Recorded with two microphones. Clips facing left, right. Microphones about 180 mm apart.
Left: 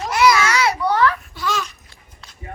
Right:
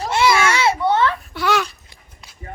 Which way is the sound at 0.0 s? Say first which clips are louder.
Even; 25° right (ahead or behind).